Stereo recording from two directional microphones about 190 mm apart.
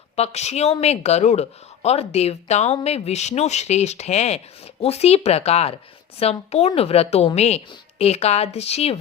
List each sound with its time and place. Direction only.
0.2 s speech: 35° left (ahead or behind)